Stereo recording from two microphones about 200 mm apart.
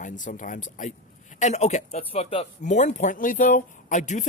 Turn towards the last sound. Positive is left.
turn(degrees=35)  # may be behind; listen again after turning